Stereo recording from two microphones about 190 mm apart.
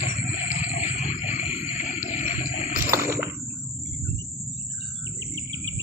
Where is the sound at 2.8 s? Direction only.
15° right (ahead or behind).